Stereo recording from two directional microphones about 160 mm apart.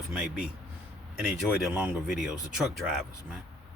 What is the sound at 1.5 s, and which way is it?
Speech, 5° right (ahead or behind).